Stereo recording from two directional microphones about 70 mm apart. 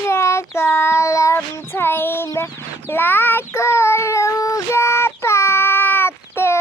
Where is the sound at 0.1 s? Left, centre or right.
Left.